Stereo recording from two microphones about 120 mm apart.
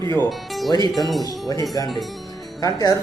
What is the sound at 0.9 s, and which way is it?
Speech, centre (ahead or behind).